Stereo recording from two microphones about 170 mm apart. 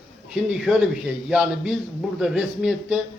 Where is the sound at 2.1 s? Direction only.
5° right (ahead or behind).